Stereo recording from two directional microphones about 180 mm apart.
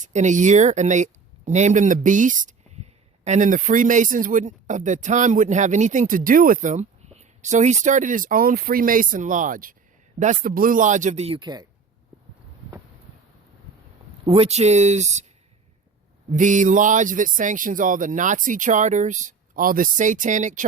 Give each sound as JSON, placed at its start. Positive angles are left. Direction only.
{"t": 0.0, "sound": "speech", "side_deg": -40}
{"t": 14.3, "sound": "speech", "side_deg": -35}
{"t": 16.3, "sound": "speech", "side_deg": -45}